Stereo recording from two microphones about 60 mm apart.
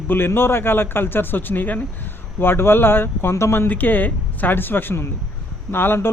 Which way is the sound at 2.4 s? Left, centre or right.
Left.